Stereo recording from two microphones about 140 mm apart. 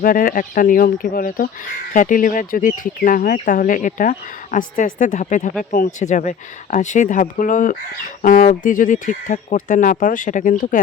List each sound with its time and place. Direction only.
0.0 s speech: 80° left
1.9 s speech: 70° left (ahead or behind)
4.9 s speech: 60° left (ahead or behind)